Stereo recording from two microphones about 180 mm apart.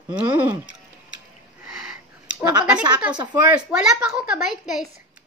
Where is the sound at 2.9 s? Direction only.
5° right (ahead or behind).